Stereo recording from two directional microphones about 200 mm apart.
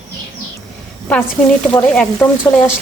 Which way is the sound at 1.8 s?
5° left (ahead or behind).